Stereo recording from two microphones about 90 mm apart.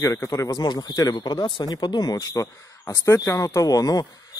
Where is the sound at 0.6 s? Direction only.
50° left (ahead or behind).